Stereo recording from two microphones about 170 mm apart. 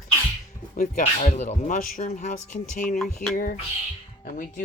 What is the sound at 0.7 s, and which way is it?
Speech, 55° left (ahead or behind).